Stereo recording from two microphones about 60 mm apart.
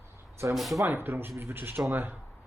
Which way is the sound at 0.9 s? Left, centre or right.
Right.